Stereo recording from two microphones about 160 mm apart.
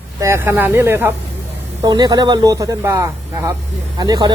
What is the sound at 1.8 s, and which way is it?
Speech, 25° right (ahead or behind).